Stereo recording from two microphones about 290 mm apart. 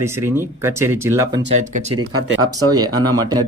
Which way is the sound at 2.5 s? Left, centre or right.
Centre.